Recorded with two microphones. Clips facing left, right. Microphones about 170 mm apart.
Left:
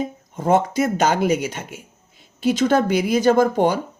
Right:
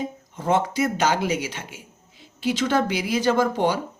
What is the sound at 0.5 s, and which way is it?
Speech, 45° left (ahead or behind).